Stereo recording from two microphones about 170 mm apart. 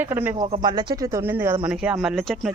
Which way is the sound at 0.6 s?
25° right (ahead or behind).